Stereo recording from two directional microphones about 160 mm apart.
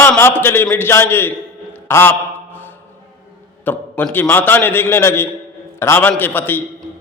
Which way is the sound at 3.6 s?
10° left (ahead or behind).